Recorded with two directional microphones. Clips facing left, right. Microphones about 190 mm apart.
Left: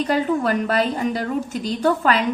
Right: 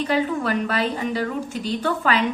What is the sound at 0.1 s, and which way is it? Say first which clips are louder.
A woman's voice: left 2 dB; 45° left (ahead or behind).